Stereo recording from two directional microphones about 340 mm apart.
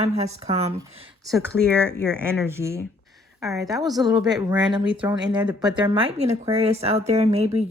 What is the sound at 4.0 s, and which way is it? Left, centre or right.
Speech, centre.